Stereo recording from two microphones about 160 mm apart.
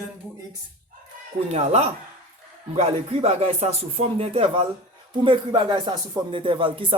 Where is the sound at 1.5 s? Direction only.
45° right (ahead or behind).